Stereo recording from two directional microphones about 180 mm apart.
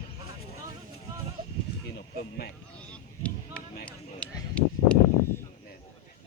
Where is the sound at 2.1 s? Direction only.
60° left (ahead or behind).